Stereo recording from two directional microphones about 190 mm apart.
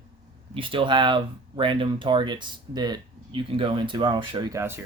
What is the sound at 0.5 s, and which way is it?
Speech, 25° right (ahead or behind).